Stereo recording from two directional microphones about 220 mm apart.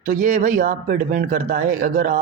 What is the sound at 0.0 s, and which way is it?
A man's voice, 35° right (ahead or behind).